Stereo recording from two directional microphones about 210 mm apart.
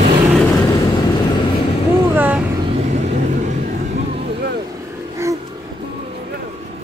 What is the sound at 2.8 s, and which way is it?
Vehicle, 35° right (ahead or behind).